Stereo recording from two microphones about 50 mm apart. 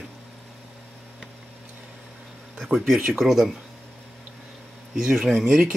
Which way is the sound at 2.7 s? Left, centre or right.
Centre.